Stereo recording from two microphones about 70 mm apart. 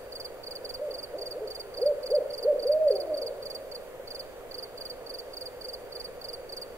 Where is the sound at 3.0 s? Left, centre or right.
Right.